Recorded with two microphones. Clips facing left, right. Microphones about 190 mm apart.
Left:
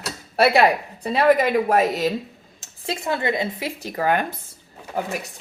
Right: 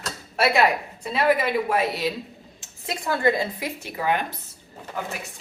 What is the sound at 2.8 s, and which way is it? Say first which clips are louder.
Speech: right 1 dB; 25° left (ahead or behind).